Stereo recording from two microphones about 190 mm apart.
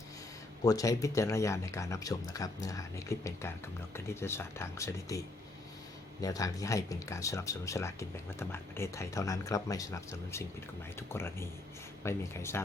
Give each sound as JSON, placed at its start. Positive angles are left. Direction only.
{"t": 0.6, "sound": "speech", "side_deg": 20}
{"t": 6.2, "sound": "speech", "side_deg": 20}